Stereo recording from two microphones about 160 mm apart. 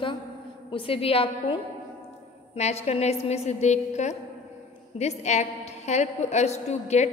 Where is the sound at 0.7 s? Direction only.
35° left (ahead or behind).